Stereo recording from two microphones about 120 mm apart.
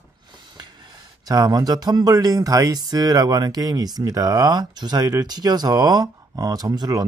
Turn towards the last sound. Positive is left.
turn(degrees=-30)  # may be behind; listen again after turning